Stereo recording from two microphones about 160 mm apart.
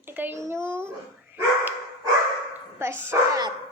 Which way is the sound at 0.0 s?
10° right (ahead or behind).